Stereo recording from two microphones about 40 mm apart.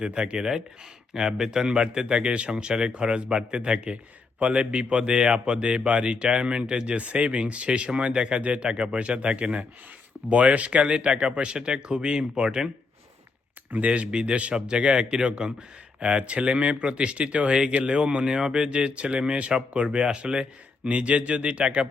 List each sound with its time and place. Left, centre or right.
0.0 s speech: right
13.7 s speech: right
13.9 s speech: right